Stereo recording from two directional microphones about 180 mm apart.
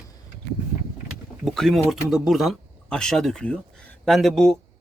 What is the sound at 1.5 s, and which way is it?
A man's voice, centre (ahead or behind).